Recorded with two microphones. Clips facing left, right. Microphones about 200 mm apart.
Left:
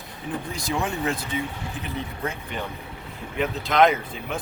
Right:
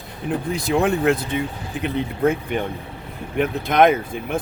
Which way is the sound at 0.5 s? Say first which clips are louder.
Right 9 dB; 60° right (ahead or behind).